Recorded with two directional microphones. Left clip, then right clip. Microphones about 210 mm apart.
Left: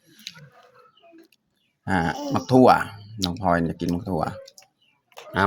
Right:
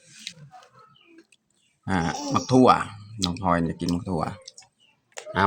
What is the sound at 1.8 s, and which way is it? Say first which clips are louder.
Speech: left 3 dB; 10° left (ahead or behind).